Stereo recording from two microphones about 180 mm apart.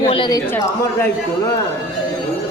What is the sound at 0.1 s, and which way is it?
Speech, 25° left (ahead or behind).